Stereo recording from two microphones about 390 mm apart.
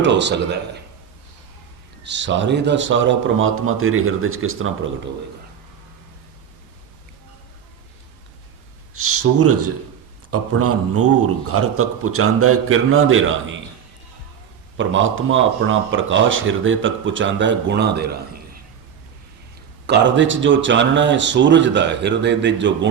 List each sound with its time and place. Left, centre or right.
0.0 s speech: right
2.0 s speech: right
9.0 s a man's voice: right
14.8 s speech: right
19.9 s speech: right